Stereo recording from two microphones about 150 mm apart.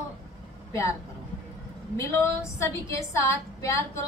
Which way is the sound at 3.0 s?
20° left (ahead or behind).